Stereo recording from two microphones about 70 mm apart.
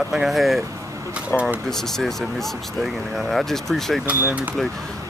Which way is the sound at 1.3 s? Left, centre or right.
Left.